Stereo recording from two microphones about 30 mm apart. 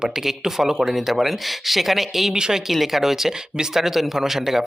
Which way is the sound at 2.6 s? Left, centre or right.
Centre.